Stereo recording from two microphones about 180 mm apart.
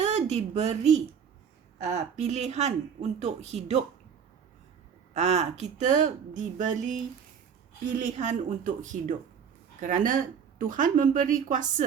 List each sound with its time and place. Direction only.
0.0 s speech: 40° right (ahead or behind)
5.1 s a woman's voice: 35° right (ahead or behind)